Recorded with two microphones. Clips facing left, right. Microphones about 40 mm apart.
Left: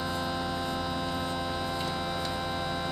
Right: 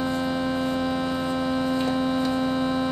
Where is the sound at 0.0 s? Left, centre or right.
Right.